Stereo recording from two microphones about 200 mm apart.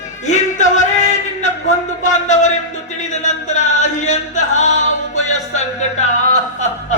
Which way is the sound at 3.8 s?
35° left (ahead or behind).